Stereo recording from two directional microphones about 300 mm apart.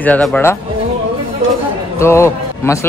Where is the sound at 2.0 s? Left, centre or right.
Centre.